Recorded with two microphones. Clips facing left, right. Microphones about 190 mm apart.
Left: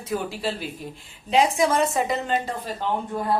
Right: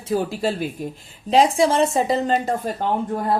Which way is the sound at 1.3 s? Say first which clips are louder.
Right 4 dB; 30° right (ahead or behind).